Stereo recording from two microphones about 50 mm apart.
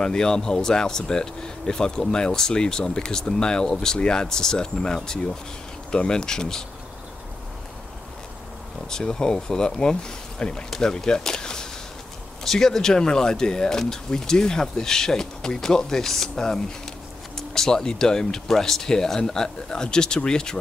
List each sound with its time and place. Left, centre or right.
0.0 s speech: centre
8.8 s speech: centre